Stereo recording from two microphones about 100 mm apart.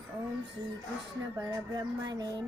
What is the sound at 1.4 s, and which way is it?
Music, 35° right (ahead or behind).